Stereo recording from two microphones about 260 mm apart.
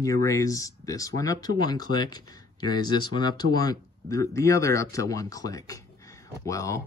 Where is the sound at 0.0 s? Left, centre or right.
Centre.